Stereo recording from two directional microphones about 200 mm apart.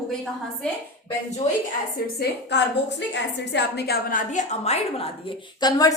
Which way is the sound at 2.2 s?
60° left (ahead or behind).